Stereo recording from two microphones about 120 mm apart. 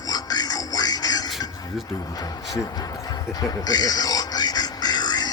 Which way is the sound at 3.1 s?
35° left (ahead or behind).